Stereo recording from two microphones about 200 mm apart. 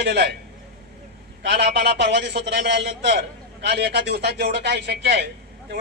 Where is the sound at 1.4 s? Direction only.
55° right (ahead or behind).